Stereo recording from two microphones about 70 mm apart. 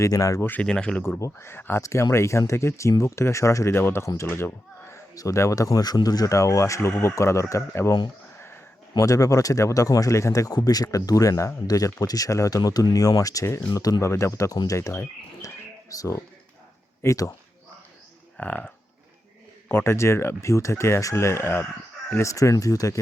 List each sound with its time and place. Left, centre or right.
0.0 s speech: left
0.3 s speech: left
0.6 s speech: centre
1.2 s speech: left
1.8 s speech: left
3.8 s speech: left
4.0 s speech: left
4.3 s speech: left
5.1 s speech: left
6.3 s speech: left
9.0 s speech: left
18.3 s speech: left
19.6 s speech: left